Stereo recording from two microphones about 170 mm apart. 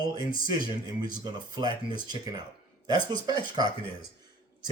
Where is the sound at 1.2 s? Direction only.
25° right (ahead or behind).